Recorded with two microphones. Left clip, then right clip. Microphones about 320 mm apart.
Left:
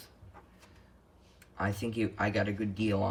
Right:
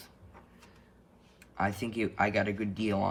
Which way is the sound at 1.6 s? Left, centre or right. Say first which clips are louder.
Right 2 dB; centre.